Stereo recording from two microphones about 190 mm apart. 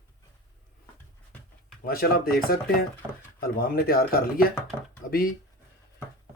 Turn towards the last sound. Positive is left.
turn(degrees=50)  # may be behind; listen again after turning